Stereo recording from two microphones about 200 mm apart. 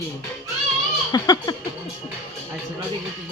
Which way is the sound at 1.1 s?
20° left (ahead or behind).